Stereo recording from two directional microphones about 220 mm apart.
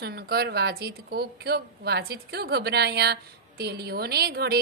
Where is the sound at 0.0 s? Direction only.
45° right (ahead or behind).